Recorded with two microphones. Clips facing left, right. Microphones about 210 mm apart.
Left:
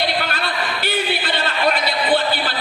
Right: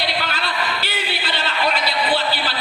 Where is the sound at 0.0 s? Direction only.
55° left (ahead or behind).